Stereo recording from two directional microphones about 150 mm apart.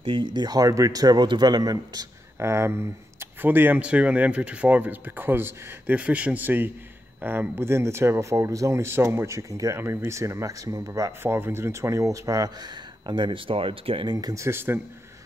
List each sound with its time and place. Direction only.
0.0 s speech: 35° right (ahead or behind)
14.1 s speech: 20° right (ahead or behind)